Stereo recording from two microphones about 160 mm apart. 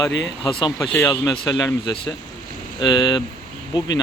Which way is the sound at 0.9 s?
15° left (ahead or behind).